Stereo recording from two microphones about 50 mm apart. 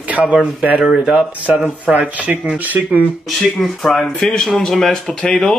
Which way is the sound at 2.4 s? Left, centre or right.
Right.